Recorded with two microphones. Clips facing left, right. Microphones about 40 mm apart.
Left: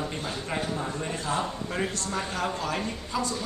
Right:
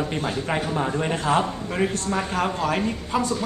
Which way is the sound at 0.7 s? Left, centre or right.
Right.